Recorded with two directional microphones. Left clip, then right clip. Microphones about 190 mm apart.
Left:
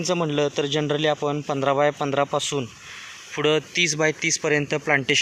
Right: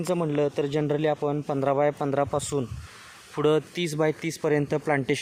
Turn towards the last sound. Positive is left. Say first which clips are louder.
# left 4 dB
turn(degrees=-15)  # may be behind; listen again after turning